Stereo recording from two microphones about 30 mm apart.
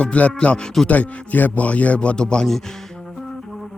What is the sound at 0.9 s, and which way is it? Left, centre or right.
A man's voice, left.